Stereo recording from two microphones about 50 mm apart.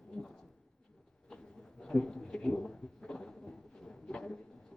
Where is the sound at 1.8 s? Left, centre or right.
Centre.